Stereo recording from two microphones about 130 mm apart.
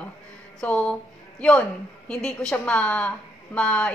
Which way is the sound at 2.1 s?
5° left (ahead or behind).